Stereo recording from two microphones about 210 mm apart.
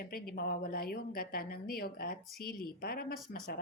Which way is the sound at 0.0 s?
45° left (ahead or behind).